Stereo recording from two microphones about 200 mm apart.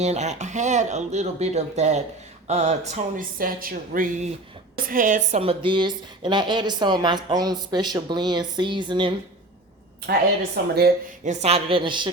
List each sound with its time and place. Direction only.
0.0 s a woman's voice: 35° right (ahead or behind)
10.6 s speech: 50° right (ahead or behind)
11.3 s a woman's voice: 30° right (ahead or behind)